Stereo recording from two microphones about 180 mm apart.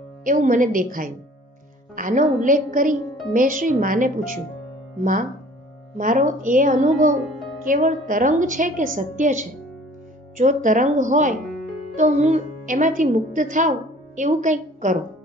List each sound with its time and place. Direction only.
0.2 s a woman's voice: 45° right (ahead or behind)
5.9 s a woman's voice: 45° right (ahead or behind)